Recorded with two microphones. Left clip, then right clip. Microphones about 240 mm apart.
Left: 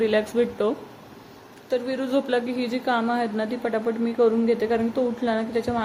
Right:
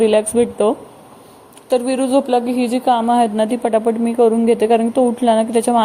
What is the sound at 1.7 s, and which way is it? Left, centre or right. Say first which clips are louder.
A woman's voice: right 9 dB; right.